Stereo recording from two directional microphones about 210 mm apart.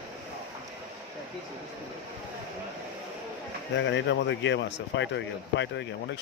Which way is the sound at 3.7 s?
60° left (ahead or behind).